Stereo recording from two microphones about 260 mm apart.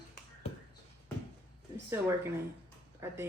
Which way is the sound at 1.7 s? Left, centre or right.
Centre.